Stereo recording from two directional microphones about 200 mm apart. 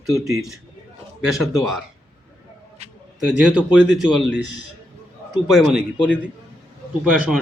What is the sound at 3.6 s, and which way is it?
Speech, 5° right (ahead or behind).